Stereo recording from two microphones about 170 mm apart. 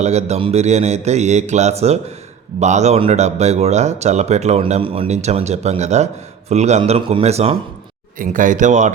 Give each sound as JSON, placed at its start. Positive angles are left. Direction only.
{"t": 0.0, "sound": "speech", "side_deg": -40}
{"t": 8.2, "sound": "speech", "side_deg": -50}